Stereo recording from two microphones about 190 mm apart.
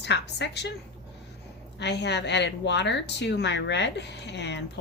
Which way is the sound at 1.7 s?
65° left (ahead or behind).